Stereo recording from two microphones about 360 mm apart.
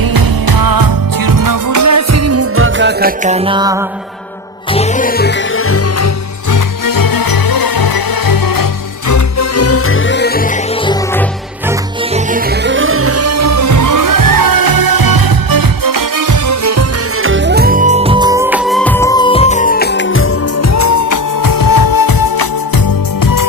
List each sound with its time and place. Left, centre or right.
0.0 s music: right; by 3.8 s centre
4.7 s music: centre; by 6.1 s left
6.5 s music: left
9.0 s music: left
10.8 s music: centre
12.1 s music: right
17.2 s music: right; by 22.4 s left
23.2 s music: left